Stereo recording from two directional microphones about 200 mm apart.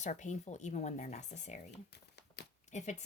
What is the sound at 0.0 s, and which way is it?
Speech, 35° left (ahead or behind).